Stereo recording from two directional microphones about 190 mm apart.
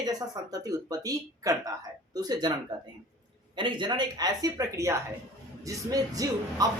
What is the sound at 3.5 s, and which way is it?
A woman's voice, 25° right (ahead or behind).